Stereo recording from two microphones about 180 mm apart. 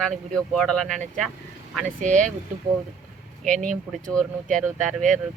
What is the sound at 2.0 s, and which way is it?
Speech, 45° right (ahead or behind).